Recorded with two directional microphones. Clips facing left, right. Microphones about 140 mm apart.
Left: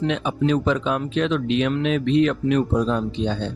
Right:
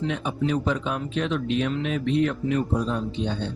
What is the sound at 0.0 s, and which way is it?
Speech, 90° left.